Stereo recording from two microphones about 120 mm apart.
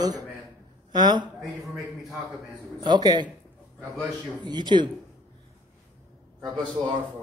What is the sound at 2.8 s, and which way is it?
Speech, 35° right (ahead or behind).